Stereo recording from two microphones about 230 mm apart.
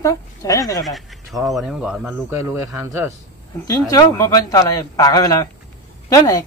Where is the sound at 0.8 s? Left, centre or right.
Centre.